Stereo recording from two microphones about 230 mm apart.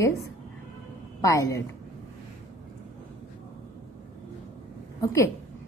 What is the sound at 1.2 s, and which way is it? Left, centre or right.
Speech, centre.